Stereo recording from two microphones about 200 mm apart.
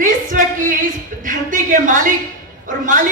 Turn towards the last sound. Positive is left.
turn(degrees=-40)  # may be behind; listen again after turning